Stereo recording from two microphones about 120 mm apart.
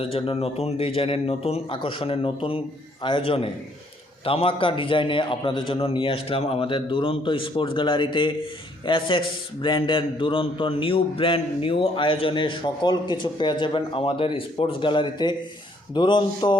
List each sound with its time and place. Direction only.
0.0 s a man's voice: 50° left (ahead or behind)